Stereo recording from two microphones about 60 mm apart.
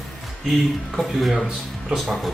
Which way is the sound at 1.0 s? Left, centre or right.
Centre.